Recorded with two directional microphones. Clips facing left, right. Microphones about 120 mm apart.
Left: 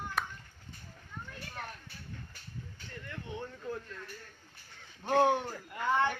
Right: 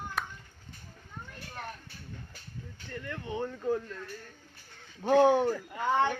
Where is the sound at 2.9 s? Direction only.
90° right.